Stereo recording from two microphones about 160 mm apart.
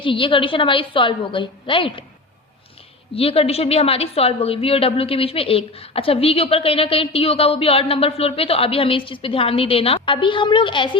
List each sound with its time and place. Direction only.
0.0 s a woman's voice: 30° left (ahead or behind)
3.2 s a woman's voice: 35° left (ahead or behind)